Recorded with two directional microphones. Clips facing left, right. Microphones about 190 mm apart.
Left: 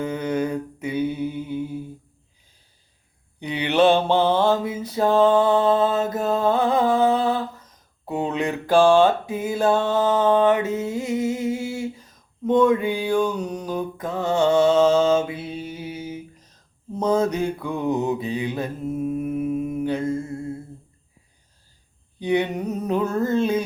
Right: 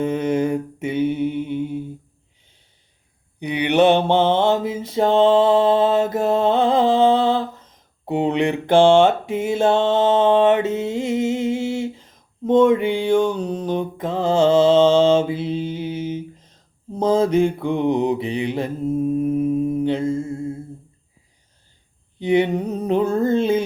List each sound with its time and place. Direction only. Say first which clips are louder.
0.0 s mantra: right 4 dB; 25° right (ahead or behind)
3.4 s mantra: right 2 dB; 15° right (ahead or behind)
22.2 s a sound: right 4 dB; 25° right (ahead or behind)